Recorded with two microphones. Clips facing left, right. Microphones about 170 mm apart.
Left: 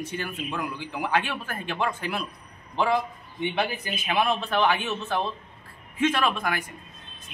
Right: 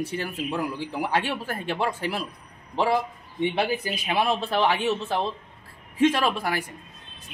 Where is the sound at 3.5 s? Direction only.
35° right (ahead or behind).